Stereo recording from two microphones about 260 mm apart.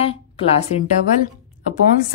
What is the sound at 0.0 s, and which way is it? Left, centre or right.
Speech, left.